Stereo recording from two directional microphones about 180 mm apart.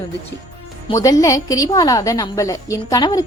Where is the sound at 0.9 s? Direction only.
20° left (ahead or behind).